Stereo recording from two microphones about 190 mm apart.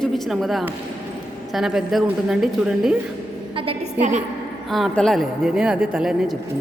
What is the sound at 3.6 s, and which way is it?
Speech, 35° right (ahead or behind).